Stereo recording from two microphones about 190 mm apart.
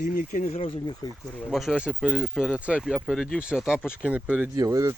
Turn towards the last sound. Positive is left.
turn(degrees=-20)  # may be behind; listen again after turning